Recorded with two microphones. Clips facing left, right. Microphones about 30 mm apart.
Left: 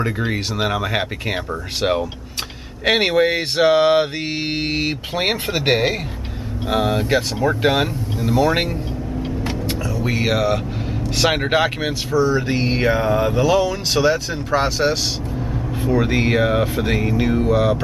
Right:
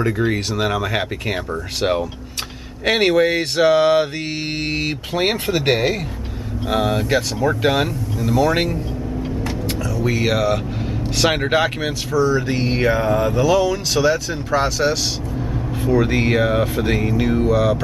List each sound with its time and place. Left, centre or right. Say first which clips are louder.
0.0 s speech: right 2 dB; centre
9.2 s vehicle: left 1 dB; left
9.7 s vehicle: right 3 dB; centre
11.1 s speech: even; centre